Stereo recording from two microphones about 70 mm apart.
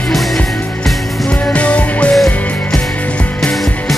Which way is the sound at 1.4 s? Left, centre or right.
Centre.